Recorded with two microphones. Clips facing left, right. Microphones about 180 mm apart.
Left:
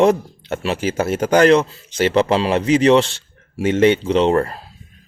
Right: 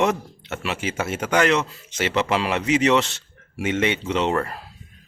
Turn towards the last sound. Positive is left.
turn(degrees=35)  # may be behind; listen again after turning